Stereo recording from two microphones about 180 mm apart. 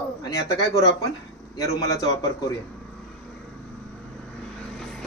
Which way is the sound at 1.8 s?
20° left (ahead or behind).